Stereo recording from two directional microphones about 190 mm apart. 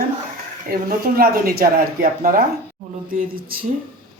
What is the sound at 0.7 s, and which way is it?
Speech, 50° right (ahead or behind).